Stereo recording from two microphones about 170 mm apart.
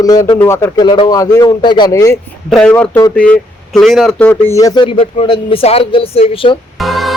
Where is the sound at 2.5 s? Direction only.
5° left (ahead or behind); by 6.6 s 30° left (ahead or behind).